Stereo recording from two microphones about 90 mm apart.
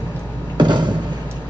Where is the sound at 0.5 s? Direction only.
60° right (ahead or behind).